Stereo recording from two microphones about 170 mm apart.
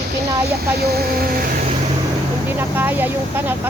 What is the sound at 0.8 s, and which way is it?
Speech, 65° right (ahead or behind).